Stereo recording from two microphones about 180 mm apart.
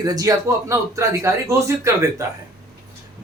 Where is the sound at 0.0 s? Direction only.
20° right (ahead or behind).